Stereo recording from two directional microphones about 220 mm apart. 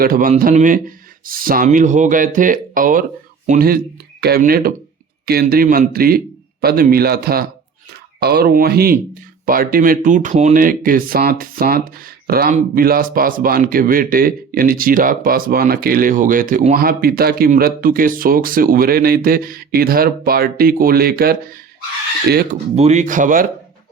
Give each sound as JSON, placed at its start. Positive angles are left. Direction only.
{"t": 0.0, "sound": "a man's voice", "side_deg": -40}
{"t": 22.7, "sound": "speech", "side_deg": -30}